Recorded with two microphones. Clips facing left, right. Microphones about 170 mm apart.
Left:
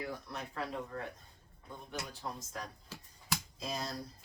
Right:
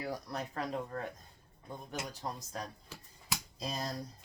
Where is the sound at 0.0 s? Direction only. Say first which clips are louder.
Right 3 dB; 40° right (ahead or behind).